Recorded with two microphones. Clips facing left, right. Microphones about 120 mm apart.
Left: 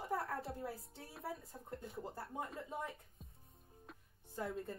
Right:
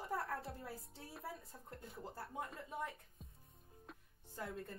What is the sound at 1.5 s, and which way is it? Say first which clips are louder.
Speech: left 5 dB; 25° left (ahead or behind).